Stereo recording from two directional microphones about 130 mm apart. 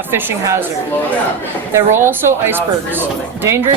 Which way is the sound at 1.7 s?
20° right (ahead or behind).